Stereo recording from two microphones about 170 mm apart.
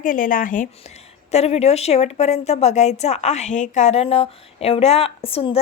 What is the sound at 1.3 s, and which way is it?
Speech, 40° left (ahead or behind).